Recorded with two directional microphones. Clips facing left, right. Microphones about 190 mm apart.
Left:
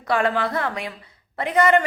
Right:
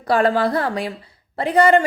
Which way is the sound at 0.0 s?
35° right (ahead or behind).